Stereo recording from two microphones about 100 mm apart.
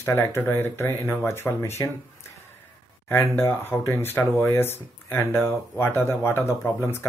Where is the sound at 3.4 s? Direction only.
25° left (ahead or behind).